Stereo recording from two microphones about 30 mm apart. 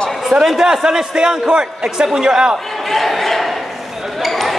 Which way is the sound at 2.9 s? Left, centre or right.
Centre.